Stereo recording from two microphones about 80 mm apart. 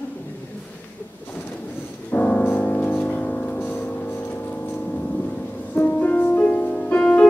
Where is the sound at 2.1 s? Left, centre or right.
Centre.